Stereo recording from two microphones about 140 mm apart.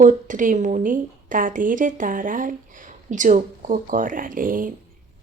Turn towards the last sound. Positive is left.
turn(degrees=-80)